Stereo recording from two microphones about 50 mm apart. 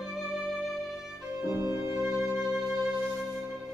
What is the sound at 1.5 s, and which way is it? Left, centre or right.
Music, right.